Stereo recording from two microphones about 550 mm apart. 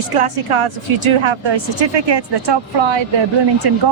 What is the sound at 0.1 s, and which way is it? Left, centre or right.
Speech, right.